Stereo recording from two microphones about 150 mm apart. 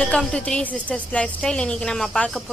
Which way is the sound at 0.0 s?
5° left (ahead or behind).